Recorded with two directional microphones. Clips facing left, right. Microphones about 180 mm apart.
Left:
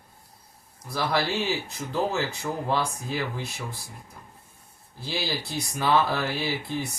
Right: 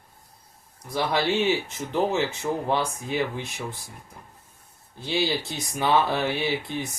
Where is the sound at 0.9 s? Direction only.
20° right (ahead or behind).